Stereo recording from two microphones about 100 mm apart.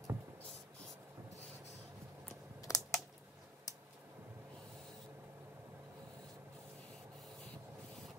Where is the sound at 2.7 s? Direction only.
35° left (ahead or behind).